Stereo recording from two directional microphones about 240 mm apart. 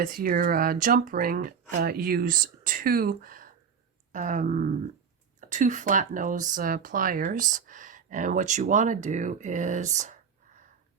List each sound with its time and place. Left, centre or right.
0.0 s speech: right